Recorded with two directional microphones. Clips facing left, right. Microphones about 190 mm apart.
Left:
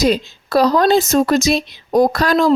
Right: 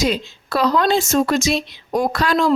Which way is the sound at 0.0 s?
40° left (ahead or behind).